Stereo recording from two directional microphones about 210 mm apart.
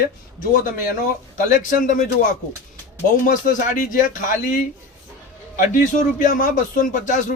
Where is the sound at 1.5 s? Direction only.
40° left (ahead or behind).